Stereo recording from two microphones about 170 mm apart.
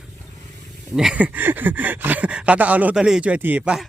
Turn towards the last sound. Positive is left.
turn(degrees=-5)  # may be behind; listen again after turning